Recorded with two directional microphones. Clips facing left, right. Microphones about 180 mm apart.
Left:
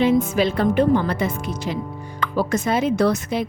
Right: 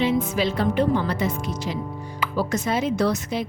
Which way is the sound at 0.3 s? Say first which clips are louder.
Left 3 dB; 55° left (ahead or behind).